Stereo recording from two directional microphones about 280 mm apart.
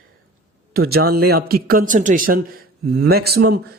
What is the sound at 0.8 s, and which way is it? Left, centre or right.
Speech, right.